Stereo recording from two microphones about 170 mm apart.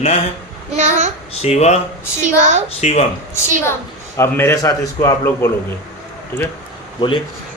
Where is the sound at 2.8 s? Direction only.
40° left (ahead or behind).